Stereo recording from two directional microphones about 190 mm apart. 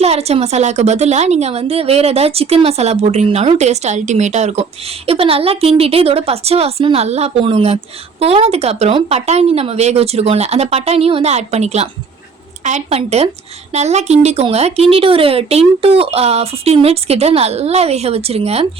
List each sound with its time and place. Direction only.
0.0 s a woman's voice: 35° right (ahead or behind)